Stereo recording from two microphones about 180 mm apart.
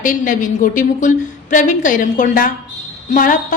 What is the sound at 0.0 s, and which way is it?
A woman's voice, 45° left (ahead or behind).